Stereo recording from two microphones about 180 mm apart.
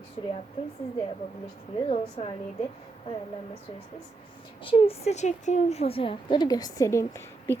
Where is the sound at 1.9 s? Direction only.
30° left (ahead or behind).